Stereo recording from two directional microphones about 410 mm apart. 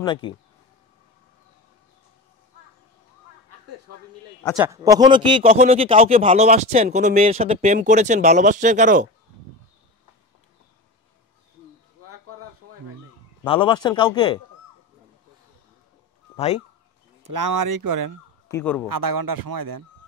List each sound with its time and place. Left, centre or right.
0.0 s speech: centre
4.6 s speech: centre
13.4 s speech: centre
16.3 s speech: centre
17.2 s speech: right
18.5 s a man's voice: centre
18.9 s speech: right